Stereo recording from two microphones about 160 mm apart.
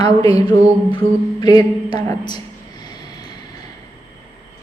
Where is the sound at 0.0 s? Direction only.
25° left (ahead or behind).